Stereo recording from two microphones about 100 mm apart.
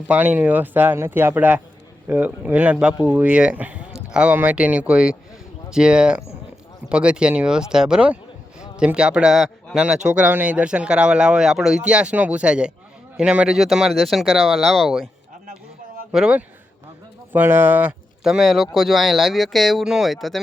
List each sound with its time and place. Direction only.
0.1 s speech: 15° right (ahead or behind)
16.1 s speech: 10° right (ahead or behind)
17.3 s speech: 20° right (ahead or behind)
18.2 s speech: 5° right (ahead or behind)